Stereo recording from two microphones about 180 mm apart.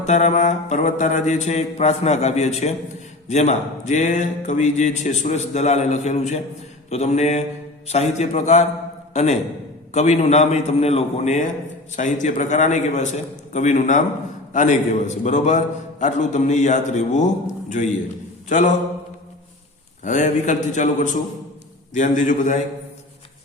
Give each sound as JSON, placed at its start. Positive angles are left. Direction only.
{"t": 0.0, "sound": "a man's voice", "side_deg": 40}
{"t": 20.1, "sound": "a man's voice", "side_deg": 45}